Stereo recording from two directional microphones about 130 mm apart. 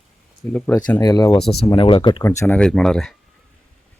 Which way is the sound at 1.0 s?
30° left (ahead or behind).